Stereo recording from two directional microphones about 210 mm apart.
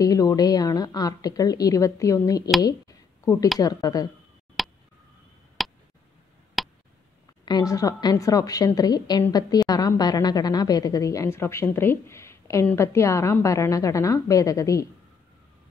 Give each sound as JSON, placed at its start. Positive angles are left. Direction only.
{"t": 0.0, "sound": "a woman's voice", "side_deg": 15}
{"t": 3.5, "sound": "a woman's voice", "side_deg": 15}
{"t": 4.6, "sound": "a sound", "side_deg": 0}
{"t": 5.6, "sound": "tick", "side_deg": 0}
{"t": 7.4, "sound": "a woman's voice", "side_deg": 20}